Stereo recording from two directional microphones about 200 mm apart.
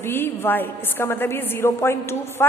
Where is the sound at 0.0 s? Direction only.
10° left (ahead or behind).